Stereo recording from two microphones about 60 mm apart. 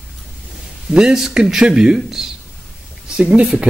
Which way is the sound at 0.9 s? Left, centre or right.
Centre.